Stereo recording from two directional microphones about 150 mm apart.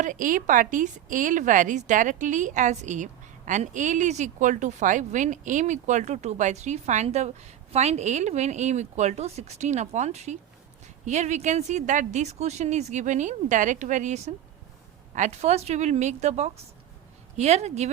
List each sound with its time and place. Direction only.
0.0 s a woman's voice: 60° right (ahead or behind)